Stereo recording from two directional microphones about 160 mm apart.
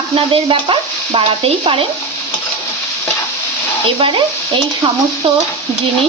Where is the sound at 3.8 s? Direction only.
35° right (ahead or behind).